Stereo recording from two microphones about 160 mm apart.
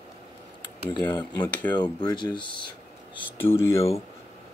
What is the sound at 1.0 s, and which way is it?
Speech, 10° left (ahead or behind).